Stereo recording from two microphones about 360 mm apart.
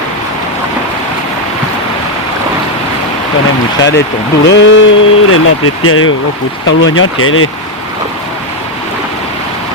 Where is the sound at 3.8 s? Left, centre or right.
Left.